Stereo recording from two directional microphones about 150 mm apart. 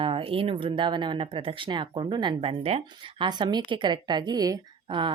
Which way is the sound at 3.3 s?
30° right (ahead or behind).